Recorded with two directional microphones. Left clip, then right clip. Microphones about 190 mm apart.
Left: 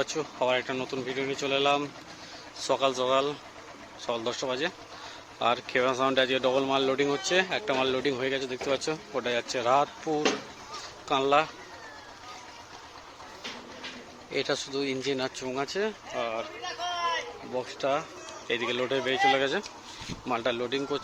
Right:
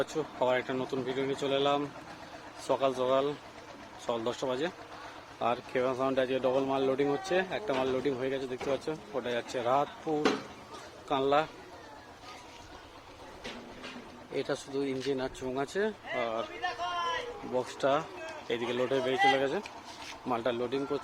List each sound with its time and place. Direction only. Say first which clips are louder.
0.0 s a man's voice: left 2 dB; 5° right (ahead or behind)
14.3 s a man's voice: left 4 dB; centre (ahead or behind)
17.6 s speech: even; 15° right (ahead or behind)
18.4 s a man's voice: left 3 dB; 5° right (ahead or behind)